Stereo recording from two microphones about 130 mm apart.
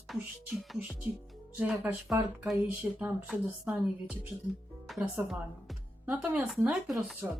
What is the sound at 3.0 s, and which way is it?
Speech, 10° right (ahead or behind).